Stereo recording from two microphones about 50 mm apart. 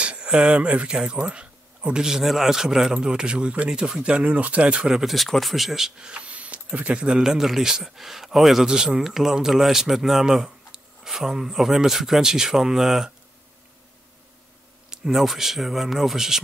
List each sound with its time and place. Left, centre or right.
0.0 s speech: right
2.0 s a man's voice: centre
4.8 s a man's voice: centre
14.9 s speech: centre